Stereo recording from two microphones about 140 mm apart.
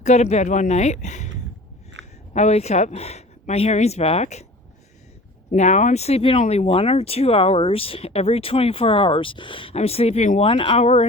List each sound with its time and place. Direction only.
0.0 s speech: 55° left (ahead or behind)
2.3 s speech: 50° left (ahead or behind)
5.5 s speech: 55° left (ahead or behind)
10.4 s speech: 40° left (ahead or behind)